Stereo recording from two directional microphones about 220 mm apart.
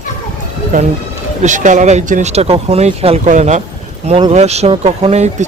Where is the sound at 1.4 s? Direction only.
35° right (ahead or behind).